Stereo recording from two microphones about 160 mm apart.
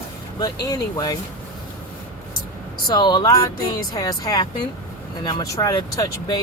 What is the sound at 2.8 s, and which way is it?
Speech, 25° left (ahead or behind).